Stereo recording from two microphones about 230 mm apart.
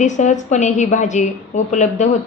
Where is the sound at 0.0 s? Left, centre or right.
Left.